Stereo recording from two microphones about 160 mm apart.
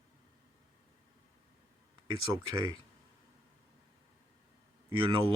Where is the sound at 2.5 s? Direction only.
25° right (ahead or behind).